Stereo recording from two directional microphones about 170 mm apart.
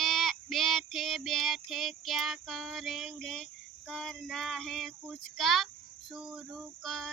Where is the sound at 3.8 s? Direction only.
5° left (ahead or behind).